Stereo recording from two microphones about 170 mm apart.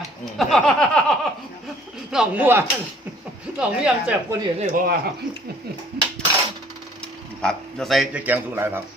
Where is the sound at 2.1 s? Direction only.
5° right (ahead or behind).